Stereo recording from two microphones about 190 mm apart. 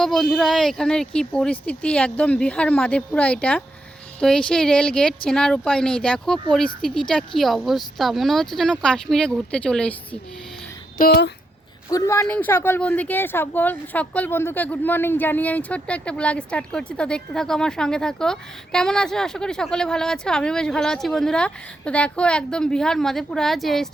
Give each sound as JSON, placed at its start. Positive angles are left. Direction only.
{"t": 0.0, "sound": "speech", "side_deg": 0}
{"t": 10.9, "sound": "speech", "side_deg": 55}
{"t": 11.9, "sound": "speech", "side_deg": 15}